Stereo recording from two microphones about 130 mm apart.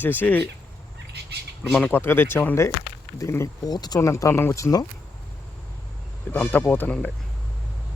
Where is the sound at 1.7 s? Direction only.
15° left (ahead or behind).